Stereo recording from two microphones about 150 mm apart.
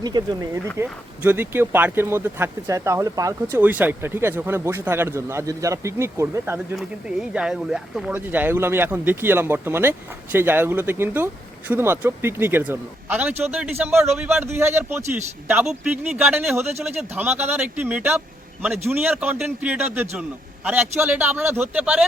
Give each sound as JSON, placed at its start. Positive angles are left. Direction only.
{"t": 0.0, "sound": "speech", "side_deg": -25}
{"t": 0.8, "sound": "speech", "side_deg": -15}
{"t": 3.6, "sound": "speech", "side_deg": -10}
{"t": 6.7, "sound": "speech", "side_deg": -5}